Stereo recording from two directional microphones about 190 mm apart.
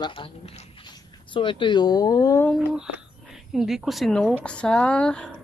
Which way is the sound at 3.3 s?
Centre (ahead or behind).